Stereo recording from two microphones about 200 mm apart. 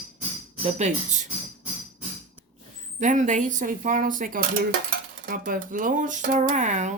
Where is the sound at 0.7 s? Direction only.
35° right (ahead or behind).